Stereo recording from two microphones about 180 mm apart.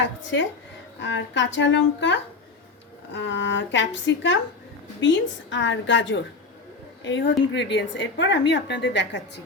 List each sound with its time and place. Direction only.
0.9 s a woman's voice: 90° left
7.5 s a woman's voice: 75° left (ahead or behind)